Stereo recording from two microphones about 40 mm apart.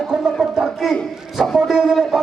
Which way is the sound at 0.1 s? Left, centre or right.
Centre.